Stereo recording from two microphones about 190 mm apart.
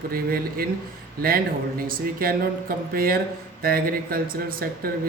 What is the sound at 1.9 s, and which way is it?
Speech, 50° right (ahead or behind).